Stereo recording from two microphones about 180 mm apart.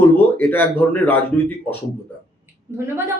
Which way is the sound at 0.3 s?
10° left (ahead or behind).